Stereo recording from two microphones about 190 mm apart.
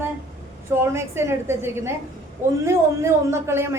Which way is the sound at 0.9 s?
15° right (ahead or behind).